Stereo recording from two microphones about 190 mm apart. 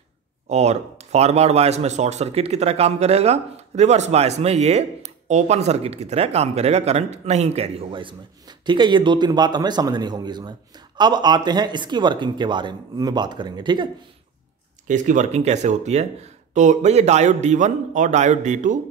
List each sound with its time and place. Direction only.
0.5 s speech: 35° right (ahead or behind)
14.9 s speech: 40° right (ahead or behind)